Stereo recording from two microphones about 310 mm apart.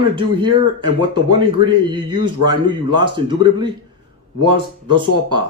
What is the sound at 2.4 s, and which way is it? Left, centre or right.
Speech, right.